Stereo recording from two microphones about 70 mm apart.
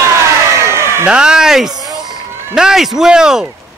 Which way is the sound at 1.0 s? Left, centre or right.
Centre.